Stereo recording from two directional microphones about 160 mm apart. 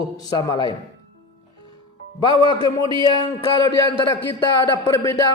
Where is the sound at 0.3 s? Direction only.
25° left (ahead or behind).